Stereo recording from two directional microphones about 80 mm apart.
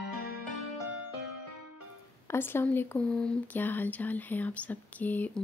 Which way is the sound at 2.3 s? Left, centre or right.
Left.